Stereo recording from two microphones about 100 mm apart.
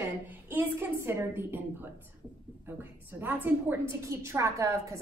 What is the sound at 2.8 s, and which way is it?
A woman's voice, 20° right (ahead or behind).